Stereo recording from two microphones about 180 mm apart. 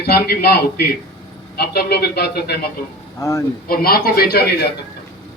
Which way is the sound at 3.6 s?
55° left (ahead or behind).